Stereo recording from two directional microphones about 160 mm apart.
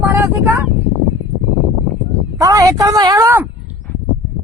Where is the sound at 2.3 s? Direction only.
20° right (ahead or behind).